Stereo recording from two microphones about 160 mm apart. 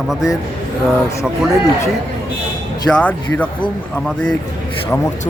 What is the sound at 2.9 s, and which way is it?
Speech, 10° left (ahead or behind).